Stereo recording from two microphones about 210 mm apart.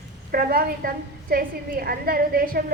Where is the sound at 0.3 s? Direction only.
45° right (ahead or behind).